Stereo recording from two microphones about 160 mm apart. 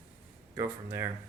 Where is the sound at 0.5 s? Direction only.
20° right (ahead or behind).